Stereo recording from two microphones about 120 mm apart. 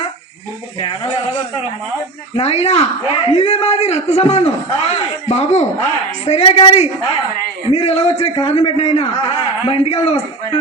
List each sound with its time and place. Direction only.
0.8 s a man's voice: 50° left (ahead or behind)
2.3 s a man's voice: 60° left (ahead or behind)